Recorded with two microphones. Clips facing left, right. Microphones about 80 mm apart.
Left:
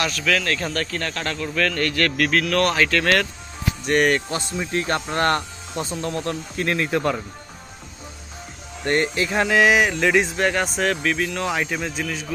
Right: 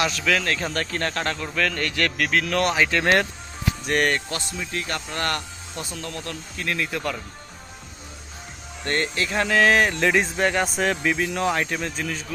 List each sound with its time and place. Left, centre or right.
0.0 s a man's voice: centre
1.5 s a man's voice: centre
3.8 s speech: centre
4.3 s speech: left
8.8 s speech: centre